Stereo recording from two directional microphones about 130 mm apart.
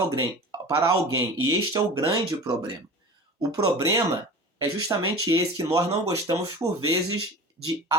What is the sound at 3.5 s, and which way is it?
Speech, 30° right (ahead or behind).